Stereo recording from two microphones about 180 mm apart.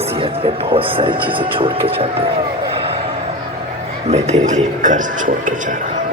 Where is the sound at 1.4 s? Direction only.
30° right (ahead or behind).